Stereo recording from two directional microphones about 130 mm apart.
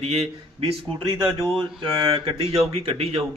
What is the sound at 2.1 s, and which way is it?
A man's voice, 40° right (ahead or behind).